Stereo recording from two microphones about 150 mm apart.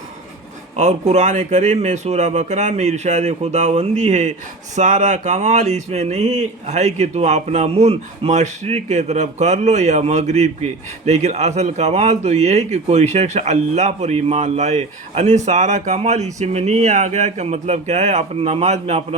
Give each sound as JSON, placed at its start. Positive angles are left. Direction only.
{"t": 0.8, "sound": "speech", "side_deg": -50}